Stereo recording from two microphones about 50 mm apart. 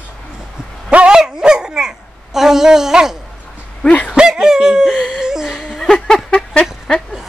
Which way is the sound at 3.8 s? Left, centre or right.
Left.